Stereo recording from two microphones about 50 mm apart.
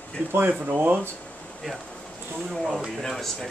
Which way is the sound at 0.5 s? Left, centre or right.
Right.